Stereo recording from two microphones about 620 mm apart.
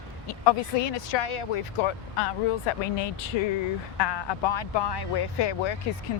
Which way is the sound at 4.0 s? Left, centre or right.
Left.